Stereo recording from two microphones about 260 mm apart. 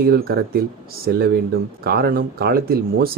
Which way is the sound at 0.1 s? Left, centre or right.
Right.